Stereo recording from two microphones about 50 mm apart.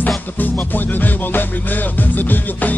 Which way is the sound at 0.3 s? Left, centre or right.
Left.